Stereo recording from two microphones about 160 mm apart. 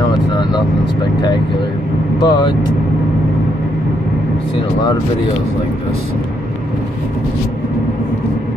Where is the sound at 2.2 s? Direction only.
30° left (ahead or behind).